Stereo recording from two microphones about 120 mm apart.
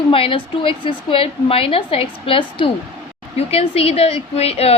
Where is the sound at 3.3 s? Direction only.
60° left (ahead or behind).